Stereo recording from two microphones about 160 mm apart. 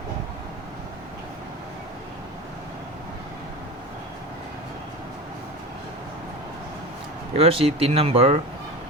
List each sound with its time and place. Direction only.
7.3 s speech: 35° right (ahead or behind)